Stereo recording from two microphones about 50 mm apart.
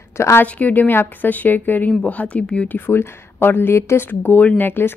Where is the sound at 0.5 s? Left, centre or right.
Left.